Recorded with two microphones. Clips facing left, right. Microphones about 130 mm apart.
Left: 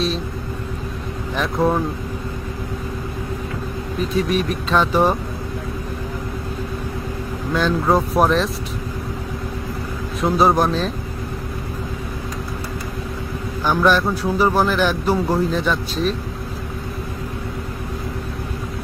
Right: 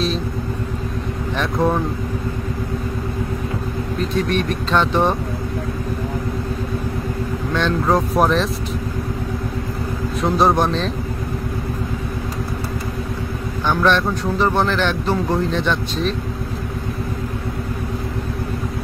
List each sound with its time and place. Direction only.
1.3 s speech: centre (ahead or behind)
4.0 s speech: centre (ahead or behind)
7.5 s speech: centre (ahead or behind)
10.2 s speech: centre (ahead or behind)
13.7 s speech: 5° left (ahead or behind)